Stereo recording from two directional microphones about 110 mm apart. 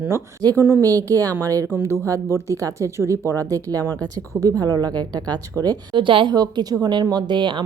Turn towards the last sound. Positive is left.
turn(degrees=-45)  # may be behind; listen again after turning